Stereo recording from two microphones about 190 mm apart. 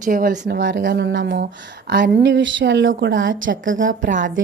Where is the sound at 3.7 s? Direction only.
45° right (ahead or behind).